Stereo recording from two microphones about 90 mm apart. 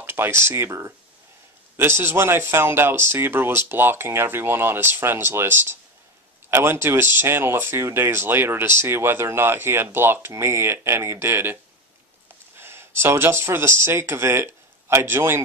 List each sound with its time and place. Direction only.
0.0 s speech: 25° right (ahead or behind)
12.5 s speech: 25° right (ahead or behind)